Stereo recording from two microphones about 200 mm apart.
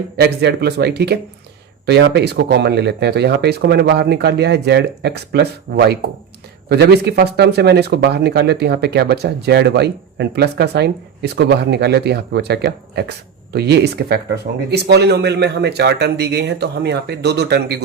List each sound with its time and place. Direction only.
0.2 s speech: 55° right (ahead or behind)